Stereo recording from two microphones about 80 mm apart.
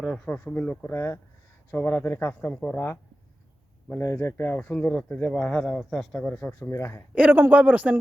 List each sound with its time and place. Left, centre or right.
0.3 s speech: left
0.9 s speech: left
4.0 s speech: left
4.5 s speech: centre
6.6 s speech: left
7.1 s speech: centre